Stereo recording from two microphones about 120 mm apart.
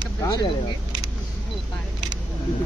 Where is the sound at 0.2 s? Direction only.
35° left (ahead or behind).